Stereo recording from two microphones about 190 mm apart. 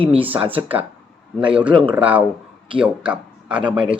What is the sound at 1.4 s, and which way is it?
Speech, 5° right (ahead or behind).